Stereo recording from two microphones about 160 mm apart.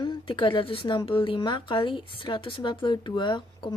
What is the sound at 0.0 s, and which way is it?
A woman's voice, 30° left (ahead or behind).